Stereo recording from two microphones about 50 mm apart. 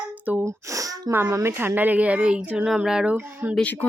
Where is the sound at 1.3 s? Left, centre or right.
Right.